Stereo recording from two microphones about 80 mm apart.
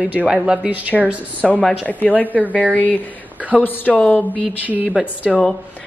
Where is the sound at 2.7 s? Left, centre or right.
Left.